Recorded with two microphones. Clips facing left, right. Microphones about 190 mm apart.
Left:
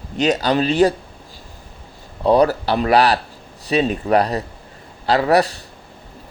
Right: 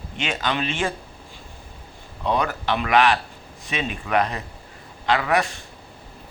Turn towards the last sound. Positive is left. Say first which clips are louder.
# left 6 dB
turn(degrees=35)  # may be behind; listen again after turning